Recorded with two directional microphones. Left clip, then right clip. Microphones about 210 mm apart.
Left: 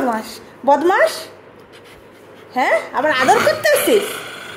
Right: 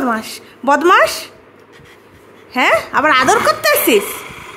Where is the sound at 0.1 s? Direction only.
30° right (ahead or behind).